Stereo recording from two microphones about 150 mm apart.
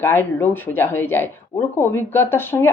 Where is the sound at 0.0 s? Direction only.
15° left (ahead or behind).